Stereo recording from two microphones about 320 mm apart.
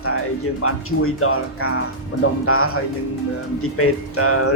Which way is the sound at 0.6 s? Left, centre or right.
Left.